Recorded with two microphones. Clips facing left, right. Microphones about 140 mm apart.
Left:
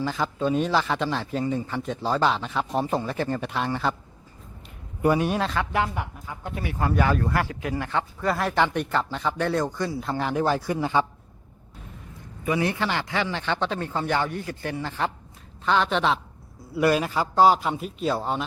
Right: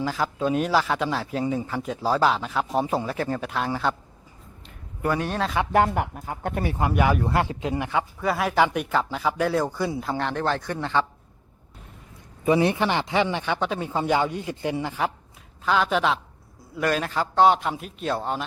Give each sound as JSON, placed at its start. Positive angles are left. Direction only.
{"t": 0.0, "sound": "speech", "side_deg": -5}
{"t": 5.0, "sound": "speech", "side_deg": 15}
{"t": 5.7, "sound": "speech", "side_deg": -50}
{"t": 6.7, "sound": "speech", "side_deg": -15}
{"t": 12.5, "sound": "speech", "side_deg": -20}
{"t": 16.7, "sound": "speech", "side_deg": 10}